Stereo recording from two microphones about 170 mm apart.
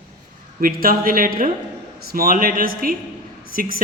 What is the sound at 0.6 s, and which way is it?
Speech, 55° right (ahead or behind).